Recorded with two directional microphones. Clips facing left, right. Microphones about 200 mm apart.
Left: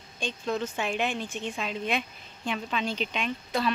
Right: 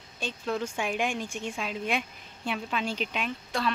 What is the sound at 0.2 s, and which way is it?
A woman's voice, 10° right (ahead or behind).